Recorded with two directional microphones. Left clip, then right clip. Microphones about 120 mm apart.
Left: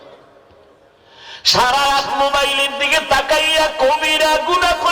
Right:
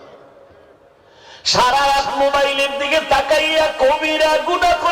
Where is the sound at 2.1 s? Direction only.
40° left (ahead or behind).